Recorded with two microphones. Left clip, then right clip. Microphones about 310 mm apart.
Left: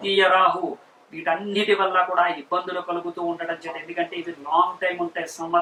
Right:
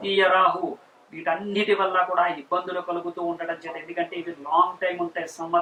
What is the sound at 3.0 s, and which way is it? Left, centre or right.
Speech, right.